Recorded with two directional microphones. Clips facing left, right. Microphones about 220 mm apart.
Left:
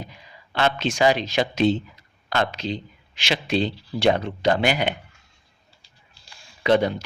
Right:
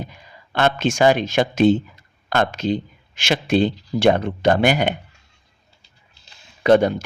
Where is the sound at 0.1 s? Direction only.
50° right (ahead or behind).